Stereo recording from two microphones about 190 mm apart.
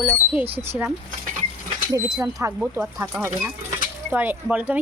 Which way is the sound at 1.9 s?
20° right (ahead or behind).